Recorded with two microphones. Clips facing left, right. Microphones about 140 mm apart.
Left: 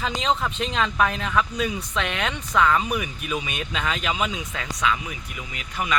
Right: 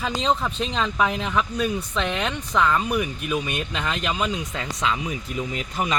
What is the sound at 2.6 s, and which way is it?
Speech, centre (ahead or behind).